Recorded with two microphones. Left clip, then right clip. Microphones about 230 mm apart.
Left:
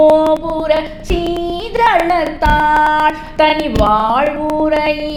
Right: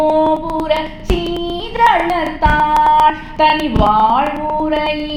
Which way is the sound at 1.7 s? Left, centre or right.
Left.